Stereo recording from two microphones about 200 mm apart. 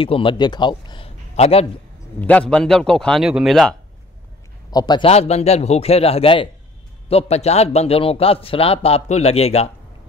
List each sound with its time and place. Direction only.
0.0 s a man's voice: 25° left (ahead or behind)
2.1 s a man's voice: 5° left (ahead or behind)
4.6 s a man's voice: 20° left (ahead or behind)